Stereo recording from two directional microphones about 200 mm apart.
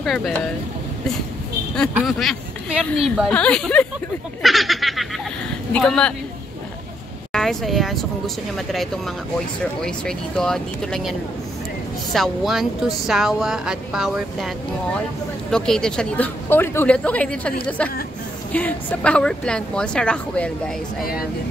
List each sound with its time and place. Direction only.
0.0 s speech: centre (ahead or behind)
2.0 s speech: centre (ahead or behind)
7.3 s speech: centre (ahead or behind)
15.5 s a woman's voice: 5° left (ahead or behind)